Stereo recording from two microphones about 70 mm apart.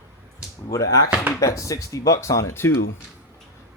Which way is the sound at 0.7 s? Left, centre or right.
Left.